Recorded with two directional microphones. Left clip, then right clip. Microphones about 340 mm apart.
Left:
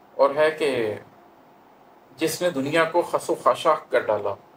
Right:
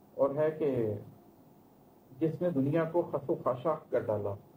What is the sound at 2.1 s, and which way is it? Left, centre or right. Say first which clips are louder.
Speech: left 8 dB; centre.